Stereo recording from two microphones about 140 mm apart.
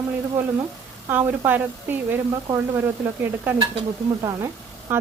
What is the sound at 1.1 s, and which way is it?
Speech, 15° right (ahead or behind).